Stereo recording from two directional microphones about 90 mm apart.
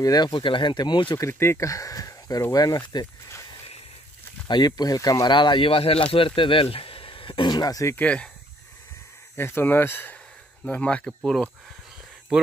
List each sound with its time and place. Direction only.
0.0 s speech: 45° left (ahead or behind)
0.3 s speech: 65° left (ahead or behind)
1.1 s speech: 30° left (ahead or behind); by 3.1 s 45° left (ahead or behind)
4.5 s speech: 50° left (ahead or behind)
5.3 s speech: 65° left (ahead or behind); by 6.0 s 90° left
6.1 s speech: 75° left (ahead or behind); by 7.9 s 45° left (ahead or behind)
7.9 s speech: 15° left (ahead or behind)
9.4 s speech: 25° left (ahead or behind)
10.6 s speech: 10° left (ahead or behind)
11.1 s speech: centre (ahead or behind)